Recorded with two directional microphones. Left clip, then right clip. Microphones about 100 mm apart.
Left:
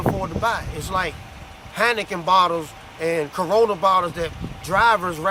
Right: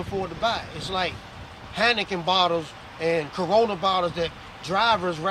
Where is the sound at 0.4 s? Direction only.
30° left (ahead or behind).